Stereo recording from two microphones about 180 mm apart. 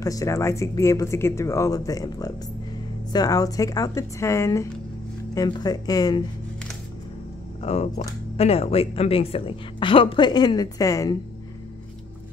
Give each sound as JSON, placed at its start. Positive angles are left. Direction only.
{"t": 0.0, "sound": "a woman's voice", "side_deg": 20}
{"t": 7.6, "sound": "a woman's voice", "side_deg": 35}